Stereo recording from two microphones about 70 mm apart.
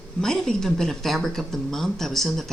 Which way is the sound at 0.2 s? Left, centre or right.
Centre.